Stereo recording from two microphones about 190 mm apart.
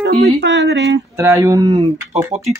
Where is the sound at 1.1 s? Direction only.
15° right (ahead or behind).